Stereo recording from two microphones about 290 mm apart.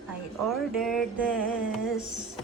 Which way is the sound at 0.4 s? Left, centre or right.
Centre.